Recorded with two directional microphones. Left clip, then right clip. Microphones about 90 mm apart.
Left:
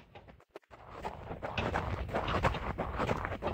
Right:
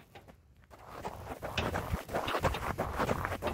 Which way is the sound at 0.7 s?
55° left (ahead or behind).